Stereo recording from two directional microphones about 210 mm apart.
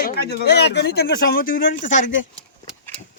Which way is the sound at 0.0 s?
50° left (ahead or behind).